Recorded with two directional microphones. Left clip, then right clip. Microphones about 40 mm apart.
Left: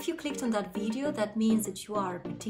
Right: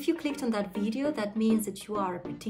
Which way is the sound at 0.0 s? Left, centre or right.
Right.